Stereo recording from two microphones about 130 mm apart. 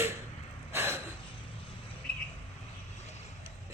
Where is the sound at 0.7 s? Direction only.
20° right (ahead or behind).